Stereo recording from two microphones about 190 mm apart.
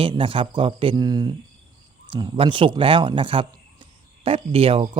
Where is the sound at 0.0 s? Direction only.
25° right (ahead or behind).